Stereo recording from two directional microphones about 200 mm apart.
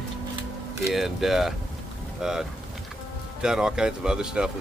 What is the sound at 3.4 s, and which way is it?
Speech, 5° right (ahead or behind).